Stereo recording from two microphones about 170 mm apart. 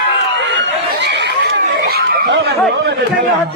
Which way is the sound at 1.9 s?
70° right (ahead or behind).